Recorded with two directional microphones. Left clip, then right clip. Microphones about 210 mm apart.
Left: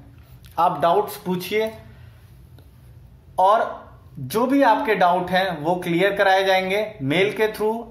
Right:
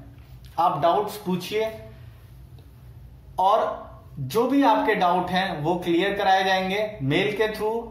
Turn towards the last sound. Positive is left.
turn(degrees=50)  # may be behind; listen again after turning